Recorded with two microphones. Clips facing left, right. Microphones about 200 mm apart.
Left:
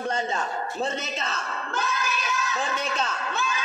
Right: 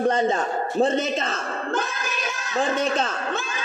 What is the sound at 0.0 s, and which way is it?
A woman's voice, 50° right (ahead or behind).